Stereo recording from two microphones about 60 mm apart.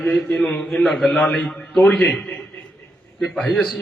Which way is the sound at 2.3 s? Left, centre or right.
Left.